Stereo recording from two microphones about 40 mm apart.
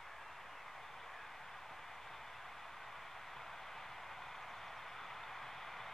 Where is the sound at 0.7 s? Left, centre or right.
Centre.